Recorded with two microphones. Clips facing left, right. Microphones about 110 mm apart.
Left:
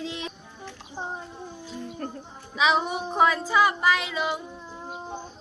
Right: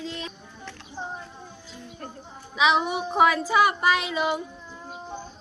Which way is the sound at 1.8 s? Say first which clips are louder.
Left 5 dB; 45° left (ahead or behind).